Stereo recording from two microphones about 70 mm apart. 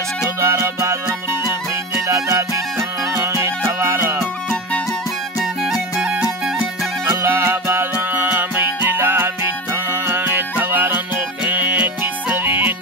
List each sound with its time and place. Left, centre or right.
0.4 s music: right
2.0 s music: right
5.4 s music: centre
7.1 s music: right